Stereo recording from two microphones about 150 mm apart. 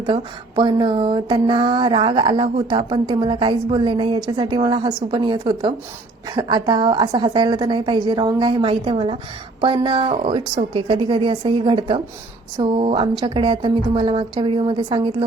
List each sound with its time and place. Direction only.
0.0 s mantra: 30° right (ahead or behind)